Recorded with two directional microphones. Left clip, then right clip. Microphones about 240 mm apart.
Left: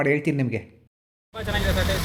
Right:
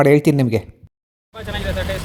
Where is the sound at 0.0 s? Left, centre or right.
Right.